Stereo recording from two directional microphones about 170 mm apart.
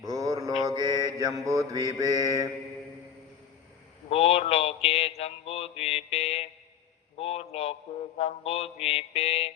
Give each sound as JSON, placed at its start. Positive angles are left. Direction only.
{"t": 0.0, "sound": "mantra", "side_deg": -20}
{"t": 4.1, "sound": "mantra", "side_deg": 35}